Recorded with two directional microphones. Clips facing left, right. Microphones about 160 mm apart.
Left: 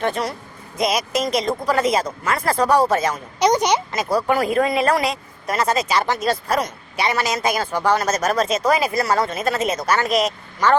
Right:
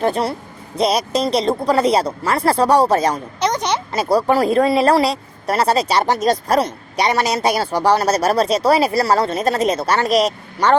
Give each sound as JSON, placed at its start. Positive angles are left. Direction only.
{"t": 0.0, "sound": "speech", "side_deg": -35}
{"t": 3.4, "sound": "a sound", "side_deg": 10}
{"t": 4.3, "sound": "speech", "side_deg": -35}